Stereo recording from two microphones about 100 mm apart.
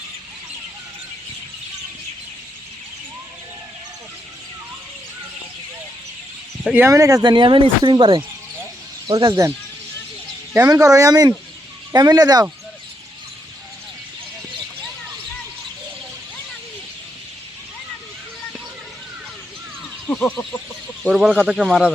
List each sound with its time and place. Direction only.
6.7 s speech: 30° right (ahead or behind); by 8.2 s 55° right (ahead or behind)
9.0 s speech: 40° right (ahead or behind)
10.6 s speech: 35° right (ahead or behind)
20.1 s a sound: 20° left (ahead or behind)
21.1 s speech: 5° right (ahead or behind)